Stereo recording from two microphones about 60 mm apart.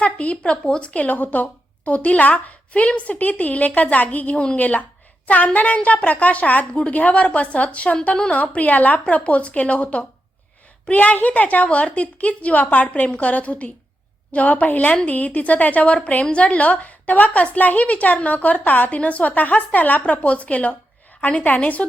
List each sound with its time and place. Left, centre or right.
0.0 s a woman's voice: left